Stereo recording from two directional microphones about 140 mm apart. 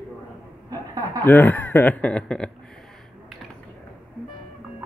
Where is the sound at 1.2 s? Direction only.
15° left (ahead or behind).